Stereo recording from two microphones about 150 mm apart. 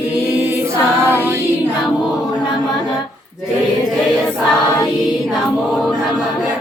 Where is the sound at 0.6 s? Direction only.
15° right (ahead or behind).